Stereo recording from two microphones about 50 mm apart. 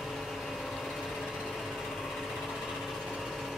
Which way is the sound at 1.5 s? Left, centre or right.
Centre.